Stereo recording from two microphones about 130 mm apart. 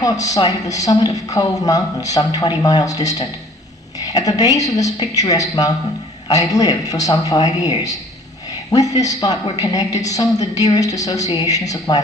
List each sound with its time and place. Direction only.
0.0 s speech: 25° left (ahead or behind)
9.0 s speech: 30° left (ahead or behind)